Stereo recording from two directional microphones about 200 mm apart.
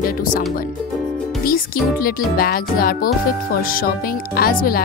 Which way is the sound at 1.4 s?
45° left (ahead or behind).